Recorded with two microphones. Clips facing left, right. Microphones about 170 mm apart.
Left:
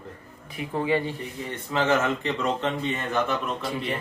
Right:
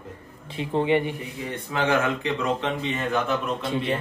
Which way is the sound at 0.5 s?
25° right (ahead or behind).